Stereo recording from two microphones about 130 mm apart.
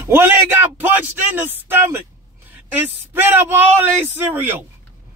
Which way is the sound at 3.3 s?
15° right (ahead or behind).